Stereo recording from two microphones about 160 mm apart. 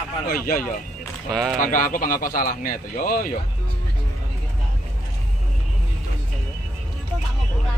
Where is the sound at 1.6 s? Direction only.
55° left (ahead or behind).